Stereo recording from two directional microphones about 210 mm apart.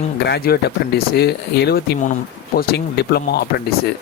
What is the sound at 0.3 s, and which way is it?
Speech, 50° left (ahead or behind).